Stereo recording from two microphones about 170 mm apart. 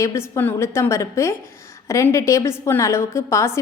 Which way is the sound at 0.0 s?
15° left (ahead or behind).